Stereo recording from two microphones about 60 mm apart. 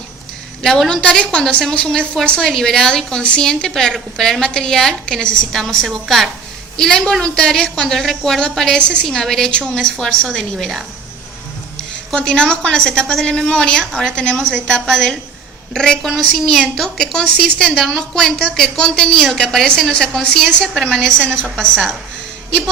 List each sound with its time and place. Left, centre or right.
0.6 s a woman's voice: centre
6.7 s a woman's voice: centre
12.1 s a woman's voice: centre
16.0 s a woman's voice: centre